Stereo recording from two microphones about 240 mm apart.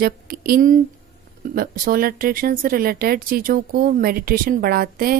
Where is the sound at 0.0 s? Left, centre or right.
Right.